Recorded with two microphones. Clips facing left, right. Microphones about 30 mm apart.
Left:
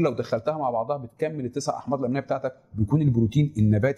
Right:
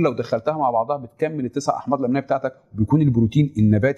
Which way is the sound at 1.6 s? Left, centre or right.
Right.